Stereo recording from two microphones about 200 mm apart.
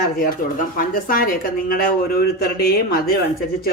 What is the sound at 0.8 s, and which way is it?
Speech, 45° left (ahead or behind).